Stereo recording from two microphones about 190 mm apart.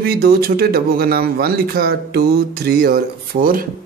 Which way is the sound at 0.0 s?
55° right (ahead or behind).